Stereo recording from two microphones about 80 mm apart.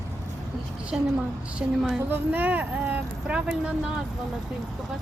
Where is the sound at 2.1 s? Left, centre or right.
Right.